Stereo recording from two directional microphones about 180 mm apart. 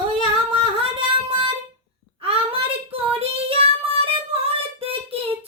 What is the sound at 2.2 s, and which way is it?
Child singing, 35° right (ahead or behind).